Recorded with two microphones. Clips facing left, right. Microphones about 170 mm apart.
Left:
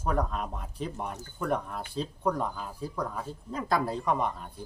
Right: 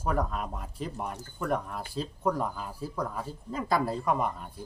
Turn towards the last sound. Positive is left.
turn(degrees=-5)  # may be behind; listen again after turning